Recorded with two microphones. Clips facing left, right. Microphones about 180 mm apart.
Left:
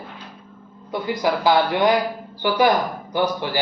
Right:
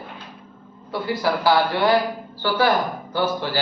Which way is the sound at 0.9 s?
15° left (ahead or behind).